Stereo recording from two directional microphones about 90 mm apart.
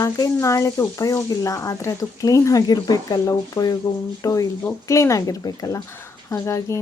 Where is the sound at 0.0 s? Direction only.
35° left (ahead or behind).